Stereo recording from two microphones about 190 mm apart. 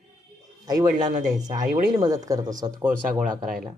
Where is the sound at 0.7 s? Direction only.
20° right (ahead or behind).